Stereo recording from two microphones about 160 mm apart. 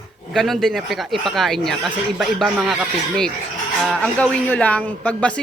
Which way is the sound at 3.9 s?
5° left (ahead or behind).